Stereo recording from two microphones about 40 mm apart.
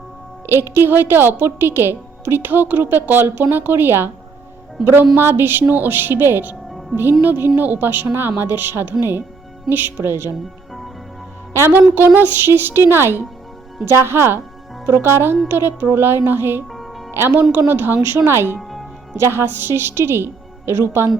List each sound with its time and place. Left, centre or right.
0.4 s a woman's voice: right
5.1 s a woman's voice: right
8.4 s a woman's voice: right
9.6 s speech: right
11.9 s a woman's voice: right
15.4 s speech: right
17.1 s speech: right
17.5 s a woman's voice: right
18.3 s a woman's voice: right